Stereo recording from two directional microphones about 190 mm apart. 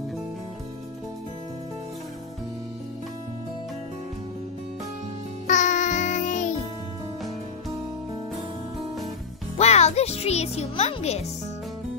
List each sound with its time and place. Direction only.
5.5 s music: 40° left (ahead or behind)
9.6 s a child's voice: 35° left (ahead or behind)